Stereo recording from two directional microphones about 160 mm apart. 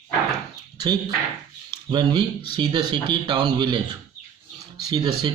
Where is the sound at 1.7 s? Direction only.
30° right (ahead or behind).